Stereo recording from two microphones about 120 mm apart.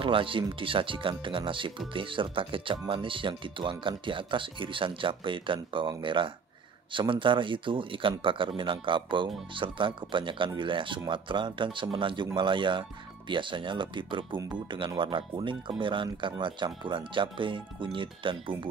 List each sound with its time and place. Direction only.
0.0 s speech: 45° right (ahead or behind)